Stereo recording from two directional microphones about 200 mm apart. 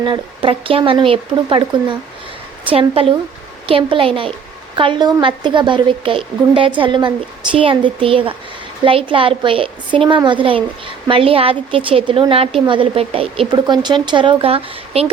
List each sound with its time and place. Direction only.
0.0 s speech: 25° right (ahead or behind)